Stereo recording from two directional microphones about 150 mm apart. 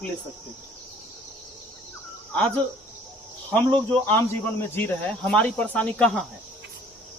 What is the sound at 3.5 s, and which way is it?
Speech, 10° left (ahead or behind).